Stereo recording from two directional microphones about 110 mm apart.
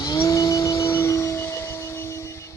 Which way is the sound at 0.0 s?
30° left (ahead or behind).